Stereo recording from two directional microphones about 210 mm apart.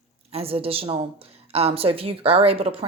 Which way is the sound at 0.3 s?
25° right (ahead or behind).